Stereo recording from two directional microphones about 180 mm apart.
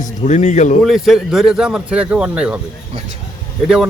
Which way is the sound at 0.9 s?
Centre (ahead or behind).